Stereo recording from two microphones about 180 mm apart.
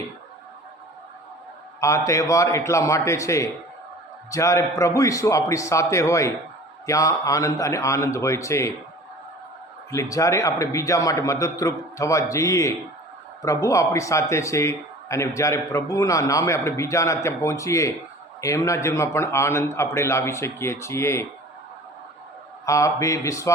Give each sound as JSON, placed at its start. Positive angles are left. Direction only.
{"t": 1.8, "sound": "speech", "side_deg": 15}
{"t": 9.9, "sound": "speech", "side_deg": 15}
{"t": 22.6, "sound": "speech", "side_deg": 15}